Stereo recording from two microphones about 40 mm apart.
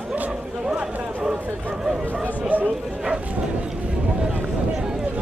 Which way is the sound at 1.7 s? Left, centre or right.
Centre.